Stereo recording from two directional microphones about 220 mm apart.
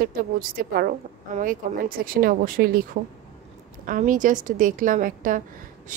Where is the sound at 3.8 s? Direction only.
35° right (ahead or behind).